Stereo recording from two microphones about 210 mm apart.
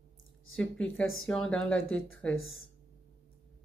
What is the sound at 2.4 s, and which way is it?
Speech, 75° left (ahead or behind).